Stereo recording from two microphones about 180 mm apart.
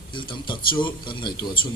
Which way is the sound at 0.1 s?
25° left (ahead or behind).